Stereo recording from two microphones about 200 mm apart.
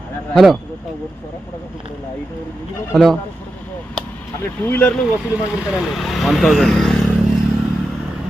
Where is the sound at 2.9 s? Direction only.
Centre (ahead or behind).